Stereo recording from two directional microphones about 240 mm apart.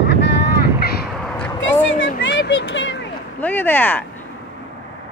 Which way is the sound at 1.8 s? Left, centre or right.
Left.